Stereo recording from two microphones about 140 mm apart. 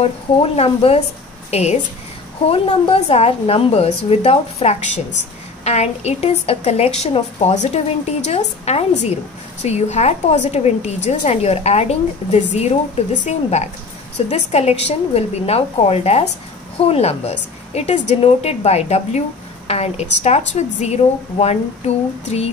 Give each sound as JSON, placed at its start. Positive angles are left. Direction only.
{"t": 0.0, "sound": "a woman's voice", "side_deg": 45}